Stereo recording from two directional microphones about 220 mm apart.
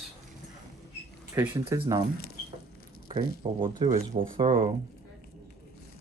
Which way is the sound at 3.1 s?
20° right (ahead or behind).